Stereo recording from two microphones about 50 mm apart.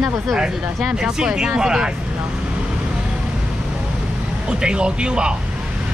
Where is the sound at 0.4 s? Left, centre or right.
Centre.